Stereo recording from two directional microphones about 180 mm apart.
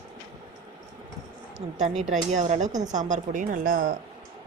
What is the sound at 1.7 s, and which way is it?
A woman's voice, 40° right (ahead or behind).